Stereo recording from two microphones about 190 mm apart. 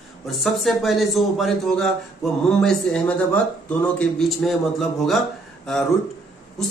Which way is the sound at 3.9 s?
Centre (ahead or behind).